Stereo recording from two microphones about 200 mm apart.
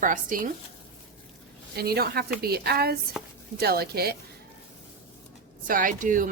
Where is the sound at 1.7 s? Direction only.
50° right (ahead or behind).